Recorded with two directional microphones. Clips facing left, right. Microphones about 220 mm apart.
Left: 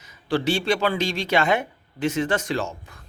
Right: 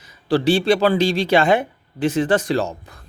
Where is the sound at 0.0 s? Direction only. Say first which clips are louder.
Right 5 dB; 35° right (ahead or behind).